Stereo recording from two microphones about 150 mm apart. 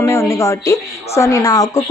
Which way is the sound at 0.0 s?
20° left (ahead or behind).